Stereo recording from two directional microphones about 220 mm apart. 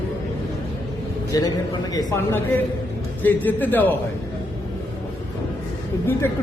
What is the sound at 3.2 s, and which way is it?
Speech, 10° left (ahead or behind).